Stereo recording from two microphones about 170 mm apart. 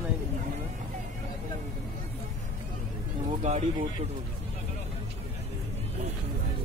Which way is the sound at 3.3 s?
40° right (ahead or behind).